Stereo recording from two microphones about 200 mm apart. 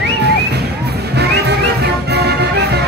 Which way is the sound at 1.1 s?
55° right (ahead or behind).